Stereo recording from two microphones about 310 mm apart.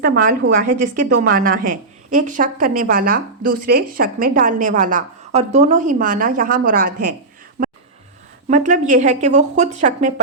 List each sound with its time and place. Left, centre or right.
0.0 s a woman's voice: right
7.6 s a sound: right
8.4 s a woman's voice: right